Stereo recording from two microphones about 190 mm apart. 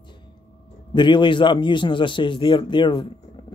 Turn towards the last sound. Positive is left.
turn(degrees=25)  # may be behind; listen again after turning